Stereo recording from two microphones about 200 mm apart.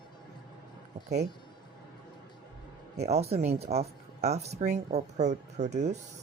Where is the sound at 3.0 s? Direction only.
30° right (ahead or behind).